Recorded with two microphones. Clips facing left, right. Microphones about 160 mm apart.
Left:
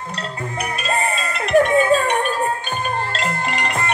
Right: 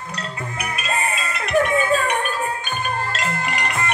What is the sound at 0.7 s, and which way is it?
Music, 35° left (ahead or behind).